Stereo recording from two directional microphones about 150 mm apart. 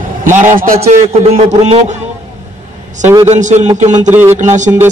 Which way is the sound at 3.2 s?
55° right (ahead or behind).